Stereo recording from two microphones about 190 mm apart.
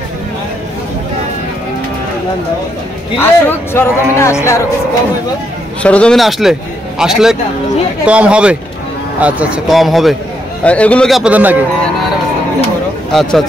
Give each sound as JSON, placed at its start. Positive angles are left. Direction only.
{"t": 3.2, "sound": "speech", "side_deg": 10}
{"t": 5.8, "sound": "a man's voice", "side_deg": 5}
{"t": 13.1, "sound": "a man's voice", "side_deg": 0}